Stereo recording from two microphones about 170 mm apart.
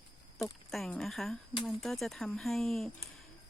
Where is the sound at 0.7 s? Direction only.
5° left (ahead or behind).